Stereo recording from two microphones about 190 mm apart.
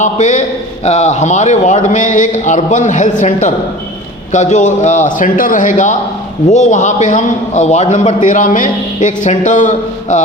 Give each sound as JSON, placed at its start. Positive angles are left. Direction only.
{"t": 0.0, "sound": "a man's voice", "side_deg": 40}